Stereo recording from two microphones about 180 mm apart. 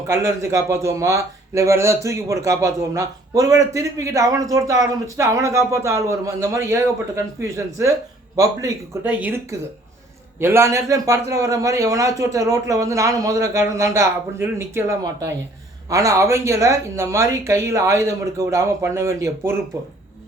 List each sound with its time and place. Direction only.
0.1 s speech: 15° right (ahead or behind)